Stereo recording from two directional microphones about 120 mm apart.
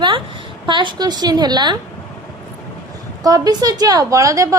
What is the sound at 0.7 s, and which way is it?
A woman's voice, 40° right (ahead or behind).